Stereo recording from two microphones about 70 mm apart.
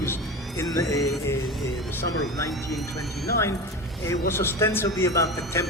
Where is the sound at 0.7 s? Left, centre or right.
Left.